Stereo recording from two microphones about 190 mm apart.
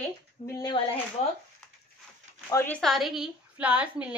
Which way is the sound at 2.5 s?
10° left (ahead or behind).